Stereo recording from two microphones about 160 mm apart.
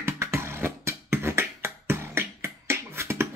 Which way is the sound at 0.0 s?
15° right (ahead or behind).